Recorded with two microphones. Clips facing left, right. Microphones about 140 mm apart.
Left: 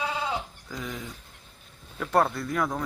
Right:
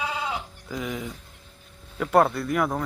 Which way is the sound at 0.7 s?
10° right (ahead or behind).